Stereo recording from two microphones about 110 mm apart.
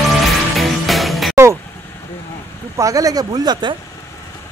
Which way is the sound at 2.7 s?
30° right (ahead or behind).